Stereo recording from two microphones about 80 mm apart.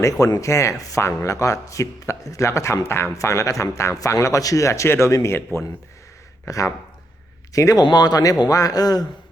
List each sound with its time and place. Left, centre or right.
0.4 s speech: left
7.5 s speech: left
7.9 s speech: left